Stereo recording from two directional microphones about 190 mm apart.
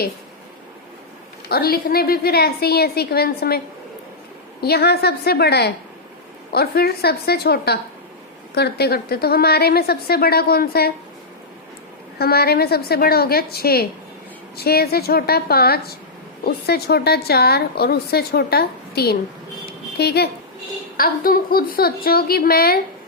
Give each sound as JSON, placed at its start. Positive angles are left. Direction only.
{"t": 1.5, "sound": "a woman's voice", "side_deg": 55}
{"t": 4.6, "sound": "a woman's voice", "side_deg": 55}
{"t": 12.2, "sound": "a woman's voice", "side_deg": 55}